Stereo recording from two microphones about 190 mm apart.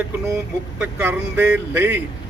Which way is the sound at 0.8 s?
10° right (ahead or behind).